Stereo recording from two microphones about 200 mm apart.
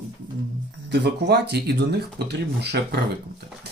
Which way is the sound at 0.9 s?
55° right (ahead or behind).